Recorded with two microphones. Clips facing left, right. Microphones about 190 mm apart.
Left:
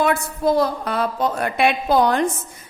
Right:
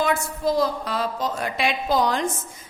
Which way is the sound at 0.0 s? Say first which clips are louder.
Left 4 dB; 60° left (ahead or behind).